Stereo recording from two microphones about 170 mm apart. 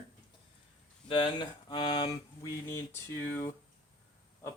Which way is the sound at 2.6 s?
15° left (ahead or behind).